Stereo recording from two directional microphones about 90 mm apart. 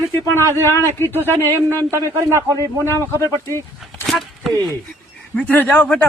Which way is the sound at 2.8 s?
25° left (ahead or behind).